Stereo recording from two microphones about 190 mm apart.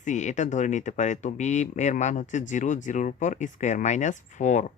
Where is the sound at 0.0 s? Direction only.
40° left (ahead or behind).